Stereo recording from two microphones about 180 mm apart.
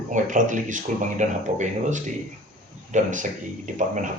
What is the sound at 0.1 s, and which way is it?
Speech, 45° right (ahead or behind).